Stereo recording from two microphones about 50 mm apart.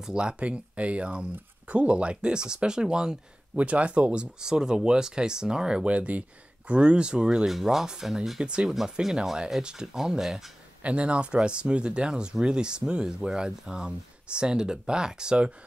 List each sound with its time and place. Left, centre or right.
0.0 s speech: centre
3.5 s speech: right
5.9 s speech: right
7.4 s speech: centre
9.0 s speech: centre
10.8 s speech: right